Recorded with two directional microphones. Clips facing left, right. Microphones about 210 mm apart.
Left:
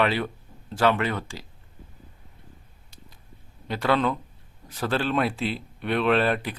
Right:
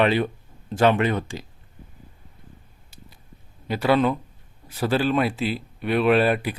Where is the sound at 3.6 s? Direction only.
5° right (ahead or behind).